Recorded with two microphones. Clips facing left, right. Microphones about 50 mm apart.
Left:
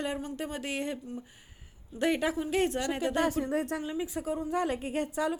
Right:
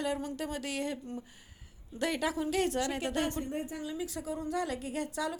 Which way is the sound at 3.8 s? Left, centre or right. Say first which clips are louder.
Left 4 dB; left.